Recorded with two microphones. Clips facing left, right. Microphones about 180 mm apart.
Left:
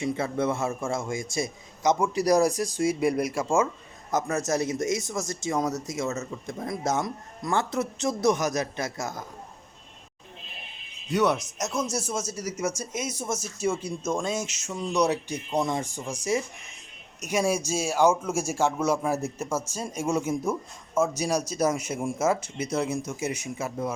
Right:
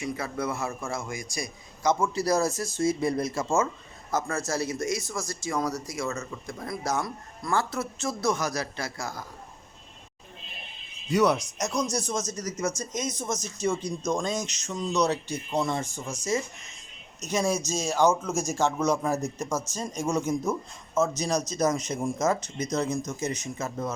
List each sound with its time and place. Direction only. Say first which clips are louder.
0.0 s a man's voice: left 4 dB; 25° left (ahead or behind)
11.1 s a man's voice: right 1 dB; centre (ahead or behind)